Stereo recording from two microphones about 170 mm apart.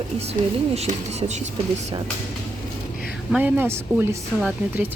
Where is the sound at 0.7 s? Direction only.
40° right (ahead or behind).